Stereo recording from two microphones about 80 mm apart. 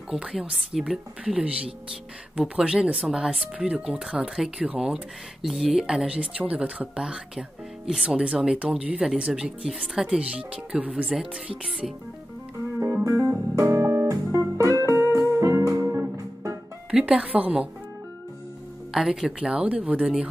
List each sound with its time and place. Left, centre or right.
0.1 s speech: centre
12.8 s music: right
16.9 s speech: centre
18.9 s speech: centre